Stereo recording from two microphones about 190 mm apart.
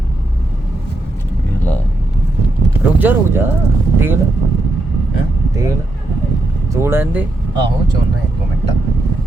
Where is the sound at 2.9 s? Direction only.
10° right (ahead or behind).